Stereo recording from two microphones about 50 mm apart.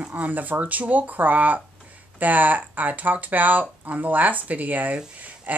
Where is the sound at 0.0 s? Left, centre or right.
Right.